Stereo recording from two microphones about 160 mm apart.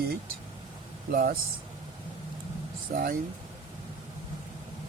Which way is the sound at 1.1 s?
65° right (ahead or behind).